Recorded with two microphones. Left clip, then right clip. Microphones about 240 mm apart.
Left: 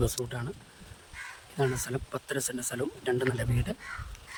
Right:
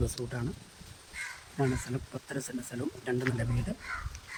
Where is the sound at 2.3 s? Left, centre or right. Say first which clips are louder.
Left 4 dB; centre.